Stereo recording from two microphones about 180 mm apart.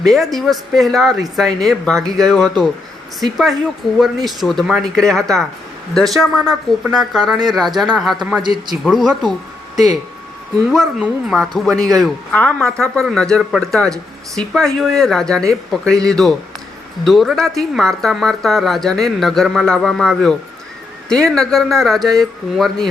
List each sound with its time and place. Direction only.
0.0 s a woman's voice: centre (ahead or behind)
8.4 s a man's voice: 25° right (ahead or behind)
8.7 s a woman's voice: centre (ahead or behind)